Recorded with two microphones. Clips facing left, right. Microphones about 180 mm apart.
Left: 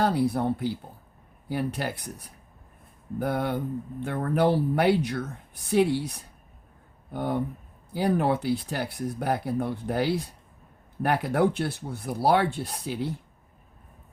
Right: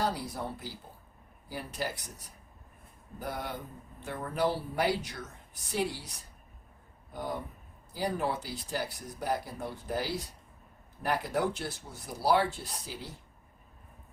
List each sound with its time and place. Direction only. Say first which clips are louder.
0.0 s speech: left 9 dB; 60° left (ahead or behind)
3.2 s speech: left 10 dB; 60° left (ahead or behind)